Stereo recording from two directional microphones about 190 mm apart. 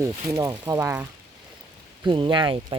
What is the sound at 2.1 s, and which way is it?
Speech, 25° right (ahead or behind).